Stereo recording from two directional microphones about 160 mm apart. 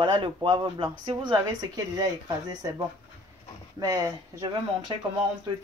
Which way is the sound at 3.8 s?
20° right (ahead or behind).